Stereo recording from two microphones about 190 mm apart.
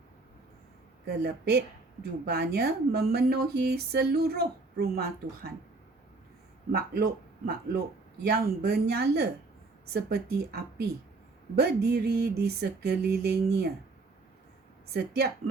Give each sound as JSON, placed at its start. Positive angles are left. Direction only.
{"t": 1.0, "sound": "speech", "side_deg": -60}
{"t": 6.7, "sound": "speech", "side_deg": -55}
{"t": 14.9, "sound": "speech", "side_deg": -55}